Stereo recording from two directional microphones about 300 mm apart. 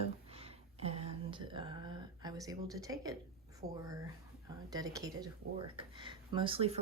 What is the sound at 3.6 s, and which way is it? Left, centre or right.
Speech, right.